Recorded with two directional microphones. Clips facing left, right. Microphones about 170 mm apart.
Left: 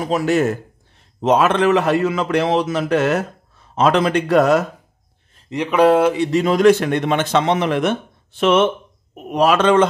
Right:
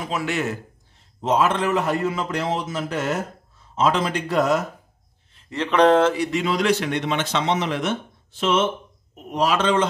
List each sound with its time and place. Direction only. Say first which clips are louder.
0.0 s a man's voice: left 8 dB; 40° left (ahead or behind)
1.2 s a man's voice: left 6 dB; 70° left (ahead or behind)
5.5 s speech: left 3 dB; 10° left (ahead or behind)
6.1 s speech: left 6 dB; 25° left (ahead or behind)
6.4 s speech: left 10 dB; 50° left (ahead or behind)